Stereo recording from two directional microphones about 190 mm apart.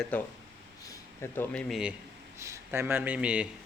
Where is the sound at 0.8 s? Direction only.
15° left (ahead or behind); by 2.0 s centre (ahead or behind).